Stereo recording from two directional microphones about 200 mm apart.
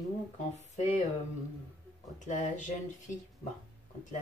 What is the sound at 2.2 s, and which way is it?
Speech, 40° left (ahead or behind).